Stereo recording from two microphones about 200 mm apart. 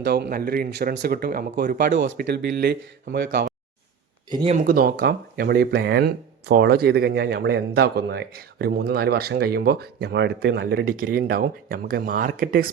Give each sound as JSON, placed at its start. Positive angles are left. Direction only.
{"t": 0.0, "sound": "speech", "side_deg": -50}
{"t": 3.2, "sound": "speech", "side_deg": -45}
{"t": 4.3, "sound": "speech", "side_deg": -20}
{"t": 4.5, "sound": "speech", "side_deg": -45}